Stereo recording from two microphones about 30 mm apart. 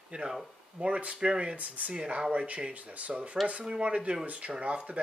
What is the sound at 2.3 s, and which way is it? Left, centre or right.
Speech, right.